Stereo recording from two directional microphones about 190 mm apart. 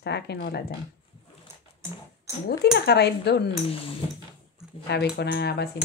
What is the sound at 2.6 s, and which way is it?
Speech, 60° left (ahead or behind).